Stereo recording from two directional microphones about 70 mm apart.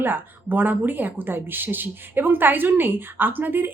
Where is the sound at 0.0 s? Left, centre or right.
Right.